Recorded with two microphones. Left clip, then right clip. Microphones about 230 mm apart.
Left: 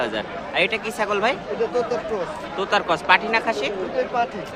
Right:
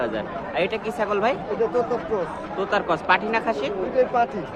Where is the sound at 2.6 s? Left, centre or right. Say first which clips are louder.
Left 2 dB; centre.